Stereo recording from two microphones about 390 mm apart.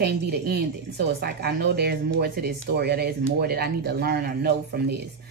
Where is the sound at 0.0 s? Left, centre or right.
Right.